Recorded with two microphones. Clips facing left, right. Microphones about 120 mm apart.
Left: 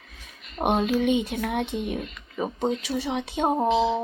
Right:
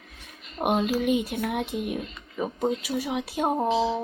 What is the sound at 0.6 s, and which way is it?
Speech, 5° right (ahead or behind).